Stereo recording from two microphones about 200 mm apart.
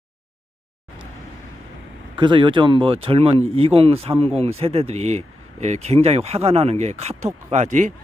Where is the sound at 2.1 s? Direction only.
25° right (ahead or behind).